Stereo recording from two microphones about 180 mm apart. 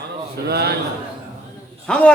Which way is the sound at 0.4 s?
60° right (ahead or behind).